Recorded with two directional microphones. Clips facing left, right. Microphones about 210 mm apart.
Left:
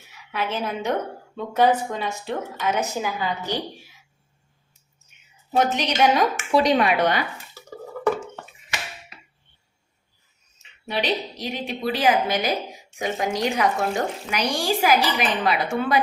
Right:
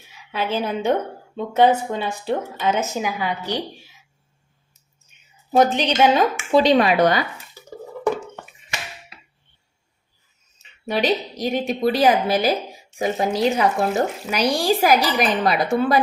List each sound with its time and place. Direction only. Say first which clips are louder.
0.3 s a woman's voice: right 3 dB; 30° right (ahead or behind)
2.9 s a woman's voice: right 2 dB; 15° right (ahead or behind)
5.5 s speech: right 5 dB; 35° right (ahead or behind)
10.8 s a woman's voice: right 4 dB; 45° right (ahead or behind)